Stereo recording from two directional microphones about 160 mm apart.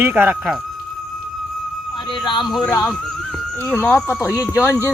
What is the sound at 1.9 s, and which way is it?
Speech, 30° left (ahead or behind).